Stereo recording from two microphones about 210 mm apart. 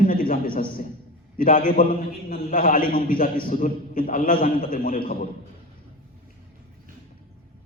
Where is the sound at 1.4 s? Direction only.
40° left (ahead or behind).